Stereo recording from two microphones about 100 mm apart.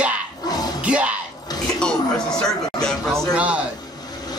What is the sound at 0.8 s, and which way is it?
Music, 10° right (ahead or behind).